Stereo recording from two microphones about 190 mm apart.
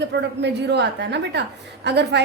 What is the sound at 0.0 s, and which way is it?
A woman's voice, 65° right (ahead or behind).